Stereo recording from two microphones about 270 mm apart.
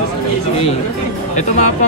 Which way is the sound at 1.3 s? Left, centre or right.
Left.